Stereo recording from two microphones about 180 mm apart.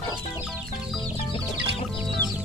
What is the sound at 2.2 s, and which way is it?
Chicken, 80° right.